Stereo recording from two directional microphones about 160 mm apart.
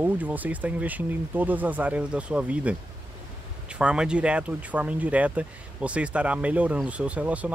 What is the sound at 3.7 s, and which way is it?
Speech, 5° right (ahead or behind).